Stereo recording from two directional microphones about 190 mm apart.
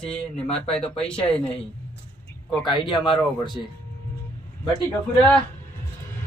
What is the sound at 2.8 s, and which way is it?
Speech, 25° left (ahead or behind).